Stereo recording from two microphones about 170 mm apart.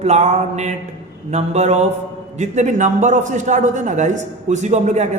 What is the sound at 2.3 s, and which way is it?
A man's voice, 45° right (ahead or behind).